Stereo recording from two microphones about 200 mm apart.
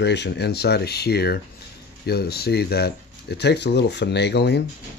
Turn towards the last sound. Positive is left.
turn(degrees=55)  # may be behind; listen again after turning